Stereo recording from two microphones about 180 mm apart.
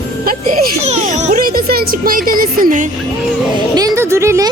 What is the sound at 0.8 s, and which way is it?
Speech, 40° right (ahead or behind).